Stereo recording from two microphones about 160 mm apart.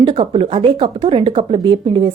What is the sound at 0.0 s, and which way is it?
Speech, 35° right (ahead or behind).